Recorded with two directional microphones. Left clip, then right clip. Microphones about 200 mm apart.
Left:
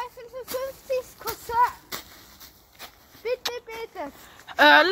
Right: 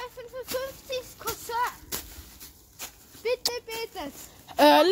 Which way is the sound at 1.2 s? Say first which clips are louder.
Left 6 dB; 25° right (ahead or behind).